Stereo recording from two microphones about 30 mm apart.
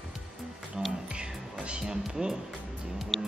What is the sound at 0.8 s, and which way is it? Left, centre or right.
Music, right.